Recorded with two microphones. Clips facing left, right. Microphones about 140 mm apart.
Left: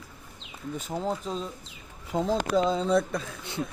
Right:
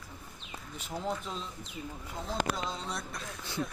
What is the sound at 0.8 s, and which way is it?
Speech, 40° left (ahead or behind).